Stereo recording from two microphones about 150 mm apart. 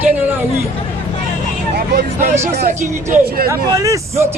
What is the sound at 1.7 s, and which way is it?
Speech, 90° right.